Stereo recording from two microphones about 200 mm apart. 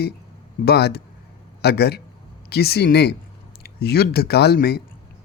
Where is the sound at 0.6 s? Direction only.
55° left (ahead or behind).